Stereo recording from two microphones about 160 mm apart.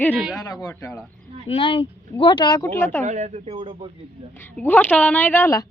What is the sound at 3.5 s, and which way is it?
Speech, 30° right (ahead or behind).